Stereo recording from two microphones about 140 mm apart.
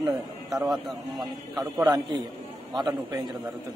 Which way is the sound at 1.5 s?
25° right (ahead or behind).